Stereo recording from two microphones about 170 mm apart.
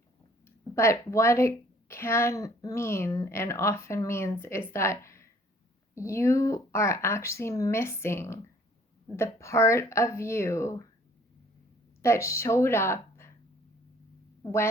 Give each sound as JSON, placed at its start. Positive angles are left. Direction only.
{"t": 0.4, "sound": "a woman's voice", "side_deg": 15}
{"t": 12.0, "sound": "a woman's voice", "side_deg": 15}
{"t": 14.4, "sound": "speech", "side_deg": 15}